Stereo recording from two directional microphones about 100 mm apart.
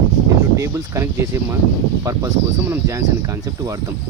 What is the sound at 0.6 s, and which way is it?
Speech, 30° right (ahead or behind).